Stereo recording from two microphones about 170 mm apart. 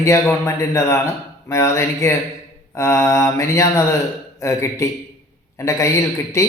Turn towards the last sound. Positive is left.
turn(degrees=15)  # may be behind; listen again after turning